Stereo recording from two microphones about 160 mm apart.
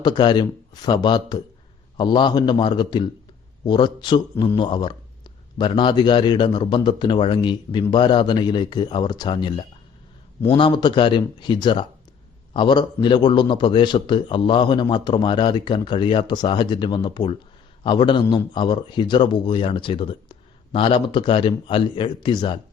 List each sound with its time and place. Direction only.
0.0 s a man's voice: 30° left (ahead or behind)